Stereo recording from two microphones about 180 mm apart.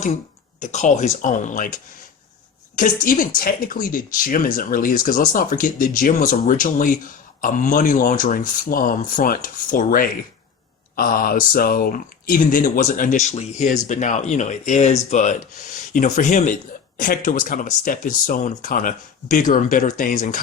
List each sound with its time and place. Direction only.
0.6 s speech: 40° left (ahead or behind)